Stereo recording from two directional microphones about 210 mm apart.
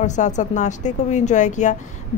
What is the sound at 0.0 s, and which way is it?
Speech, 35° left (ahead or behind).